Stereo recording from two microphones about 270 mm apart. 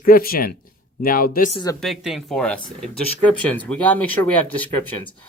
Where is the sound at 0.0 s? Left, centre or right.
Left.